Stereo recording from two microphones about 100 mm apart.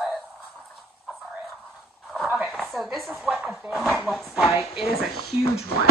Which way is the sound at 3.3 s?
15° right (ahead or behind).